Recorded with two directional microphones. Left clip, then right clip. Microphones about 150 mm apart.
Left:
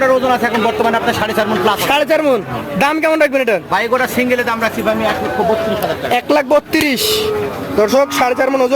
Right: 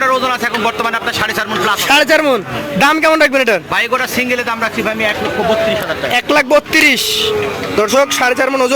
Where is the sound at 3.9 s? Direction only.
20° left (ahead or behind).